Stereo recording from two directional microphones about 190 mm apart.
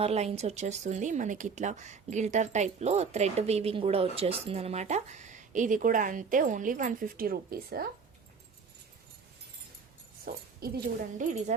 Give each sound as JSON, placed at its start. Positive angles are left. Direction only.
{"t": 0.0, "sound": "speech", "side_deg": -35}
{"t": 10.2, "sound": "speech", "side_deg": -45}